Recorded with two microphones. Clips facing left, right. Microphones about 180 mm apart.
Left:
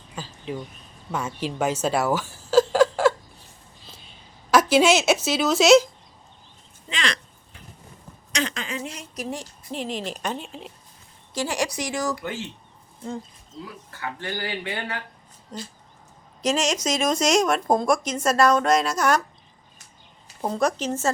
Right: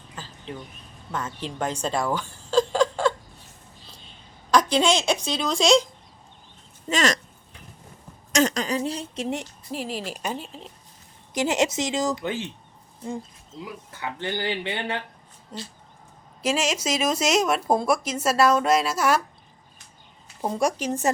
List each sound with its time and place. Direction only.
0.2 s a sound: 10° left (ahead or behind)
1.1 s speech: 10° left (ahead or behind)
4.5 s speech: 5° left (ahead or behind)
6.8 s speech: 45° right (ahead or behind)
8.3 s a woman's voice: 45° right (ahead or behind); by 9.5 s 25° right (ahead or behind)
9.7 s speech: 5° right (ahead or behind)
11.3 s speech: 20° right (ahead or behind)
13.9 s speech: 20° right (ahead or behind)
15.5 s speech: 5° right (ahead or behind)
20.4 s speech: 10° right (ahead or behind)